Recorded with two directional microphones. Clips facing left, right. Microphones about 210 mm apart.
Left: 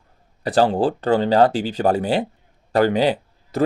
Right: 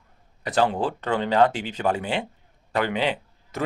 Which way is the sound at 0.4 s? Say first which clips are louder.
Left 5 dB; 35° left (ahead or behind).